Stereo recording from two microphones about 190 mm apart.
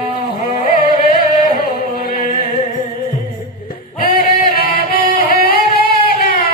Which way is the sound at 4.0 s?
50° left (ahead or behind).